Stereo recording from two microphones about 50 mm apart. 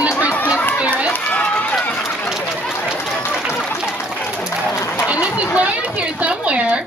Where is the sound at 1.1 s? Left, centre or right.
Left.